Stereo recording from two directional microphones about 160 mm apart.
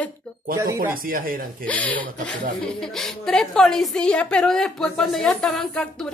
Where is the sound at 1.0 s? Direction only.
65° right (ahead or behind).